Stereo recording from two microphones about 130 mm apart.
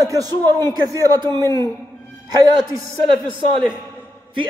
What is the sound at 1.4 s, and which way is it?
Speech, 20° left (ahead or behind).